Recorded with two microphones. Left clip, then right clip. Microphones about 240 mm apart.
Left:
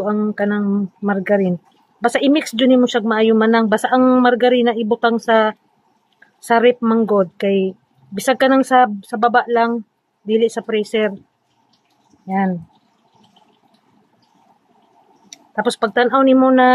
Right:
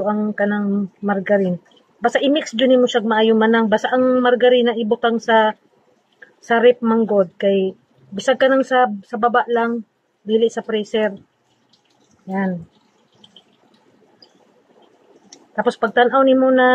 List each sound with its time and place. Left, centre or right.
0.0 s speech: left
15.5 s speech: left